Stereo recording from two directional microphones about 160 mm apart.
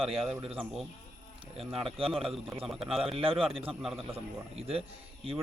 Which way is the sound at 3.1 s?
35° right (ahead or behind).